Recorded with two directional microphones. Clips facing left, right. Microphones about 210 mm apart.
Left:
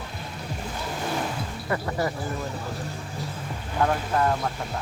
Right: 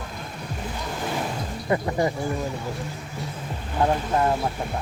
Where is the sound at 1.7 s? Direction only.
20° right (ahead or behind).